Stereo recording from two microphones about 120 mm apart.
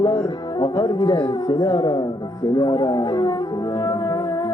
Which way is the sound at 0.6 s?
40° left (ahead or behind).